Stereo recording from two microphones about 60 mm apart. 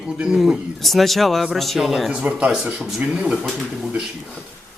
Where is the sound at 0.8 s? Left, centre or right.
Centre.